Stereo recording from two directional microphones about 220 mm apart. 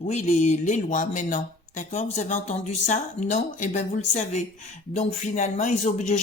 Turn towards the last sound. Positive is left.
turn(degrees=35)  # may be behind; listen again after turning